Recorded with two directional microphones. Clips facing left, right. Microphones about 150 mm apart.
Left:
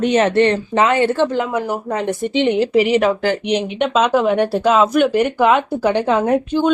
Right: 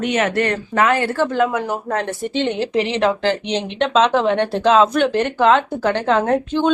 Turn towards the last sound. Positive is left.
turn(degrees=15)  # may be behind; listen again after turning